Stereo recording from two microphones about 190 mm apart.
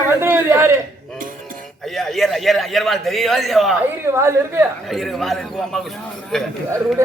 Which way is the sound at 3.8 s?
15° right (ahead or behind).